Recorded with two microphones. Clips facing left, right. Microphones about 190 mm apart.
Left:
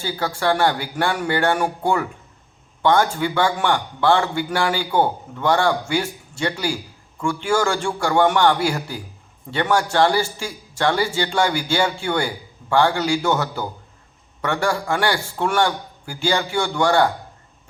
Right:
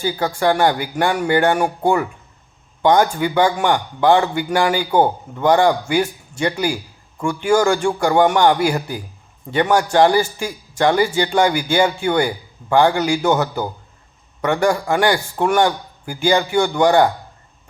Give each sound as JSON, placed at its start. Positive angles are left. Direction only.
{"t": 0.0, "sound": "a man's voice", "side_deg": -15}